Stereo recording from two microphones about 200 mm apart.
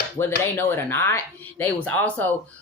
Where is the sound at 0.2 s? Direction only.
10° left (ahead or behind).